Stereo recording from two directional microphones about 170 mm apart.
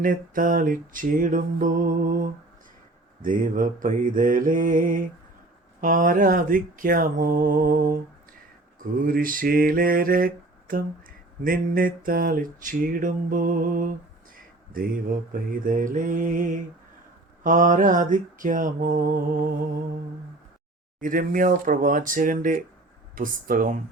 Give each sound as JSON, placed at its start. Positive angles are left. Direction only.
{"t": 0.0, "sound": "mantra", "side_deg": -50}
{"t": 3.2, "sound": "mantra", "side_deg": -55}
{"t": 21.0, "sound": "mantra", "side_deg": -55}